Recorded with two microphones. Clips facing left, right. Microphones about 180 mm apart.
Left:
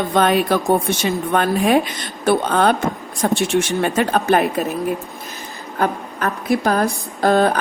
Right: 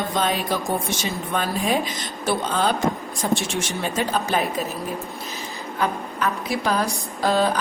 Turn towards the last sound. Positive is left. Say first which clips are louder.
# left 5 dB
turn(degrees=55)  # may be behind; listen again after turning